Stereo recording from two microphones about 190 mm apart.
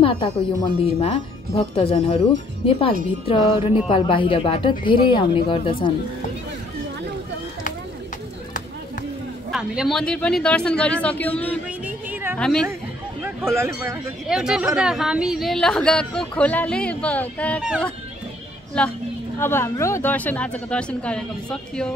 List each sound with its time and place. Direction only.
0.0 s speech: 25° left (ahead or behind)
9.5 s a woman's voice: 5° right (ahead or behind)
11.8 s music: 10° right (ahead or behind)
12.4 s a woman's voice: 5° left (ahead or behind)
13.2 s a sound: 15° right (ahead or behind)
13.7 s a woman's voice: 5° right (ahead or behind)
18.8 s a woman's voice: 5° left (ahead or behind)